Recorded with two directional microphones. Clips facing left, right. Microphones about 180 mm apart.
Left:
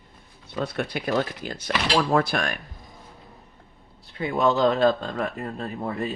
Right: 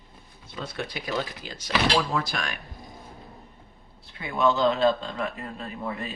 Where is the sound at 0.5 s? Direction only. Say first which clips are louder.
Left 6 dB; 55° left (ahead or behind).